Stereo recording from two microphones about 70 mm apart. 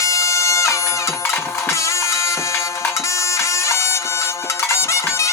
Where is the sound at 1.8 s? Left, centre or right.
Left.